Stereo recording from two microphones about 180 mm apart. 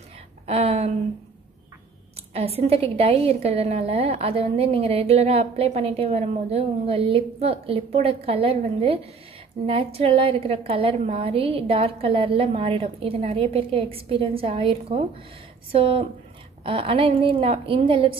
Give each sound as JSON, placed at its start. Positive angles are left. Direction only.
{"t": 0.5, "sound": "a sound", "side_deg": -35}
{"t": 2.3, "sound": "a woman's voice", "side_deg": -35}
{"t": 9.7, "sound": "a woman's voice", "side_deg": -30}